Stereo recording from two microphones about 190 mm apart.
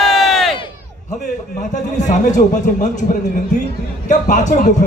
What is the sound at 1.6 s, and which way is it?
A man's voice, 40° left (ahead or behind).